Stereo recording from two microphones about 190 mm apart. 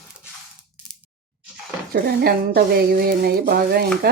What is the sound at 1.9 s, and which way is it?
A woman's voice, 55° right (ahead or behind).